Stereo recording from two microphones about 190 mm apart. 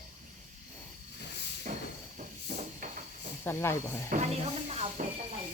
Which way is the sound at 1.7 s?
45° right (ahead or behind).